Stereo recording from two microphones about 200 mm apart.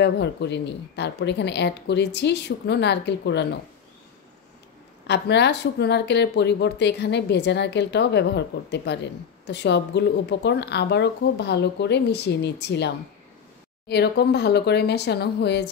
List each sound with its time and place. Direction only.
0.0 s speech: 60° left (ahead or behind)
5.0 s speech: 60° left (ahead or behind)